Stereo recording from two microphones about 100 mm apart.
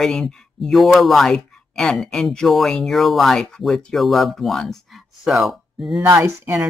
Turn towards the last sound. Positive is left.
turn(degrees=-25)  # may be behind; listen again after turning